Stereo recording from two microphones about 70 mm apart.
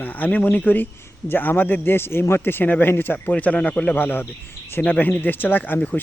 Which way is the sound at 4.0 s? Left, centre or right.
Left.